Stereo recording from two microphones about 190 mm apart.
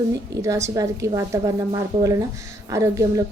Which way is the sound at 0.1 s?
15° right (ahead or behind).